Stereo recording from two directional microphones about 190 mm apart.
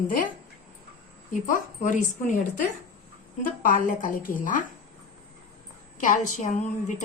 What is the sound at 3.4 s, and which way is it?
A woman's voice, 45° left (ahead or behind).